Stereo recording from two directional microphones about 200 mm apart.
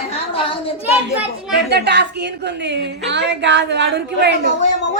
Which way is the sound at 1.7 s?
55° right (ahead or behind).